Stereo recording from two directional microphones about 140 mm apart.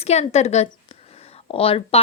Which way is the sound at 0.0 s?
50° left (ahead or behind).